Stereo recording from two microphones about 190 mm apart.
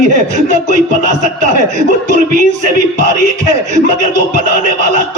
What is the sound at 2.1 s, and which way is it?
Speech, 40° right (ahead or behind).